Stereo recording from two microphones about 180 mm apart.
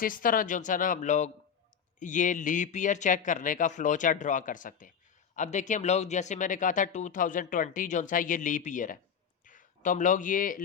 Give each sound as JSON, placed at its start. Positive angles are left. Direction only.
{"t": 0.0, "sound": "speech", "side_deg": 50}